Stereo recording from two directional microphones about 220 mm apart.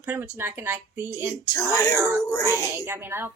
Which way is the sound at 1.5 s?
15° left (ahead or behind).